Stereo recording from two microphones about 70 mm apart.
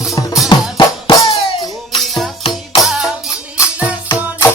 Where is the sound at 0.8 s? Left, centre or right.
Left.